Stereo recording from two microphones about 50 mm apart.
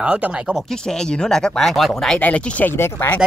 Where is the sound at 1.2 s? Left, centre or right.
Centre.